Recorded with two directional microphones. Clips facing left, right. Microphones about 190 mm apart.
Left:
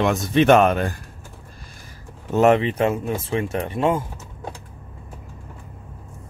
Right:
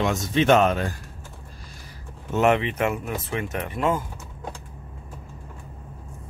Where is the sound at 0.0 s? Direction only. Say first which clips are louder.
Left 4 dB; 60° left (ahead or behind).